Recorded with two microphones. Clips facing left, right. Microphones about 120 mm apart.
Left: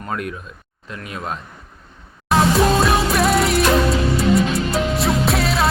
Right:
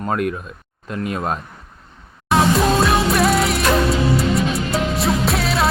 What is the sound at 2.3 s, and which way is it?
Music, centre (ahead or behind).